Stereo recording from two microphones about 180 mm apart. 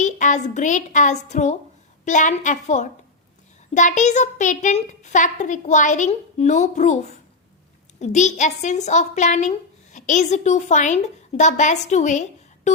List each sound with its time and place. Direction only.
0.0 s a woman's voice: 40° left (ahead or behind)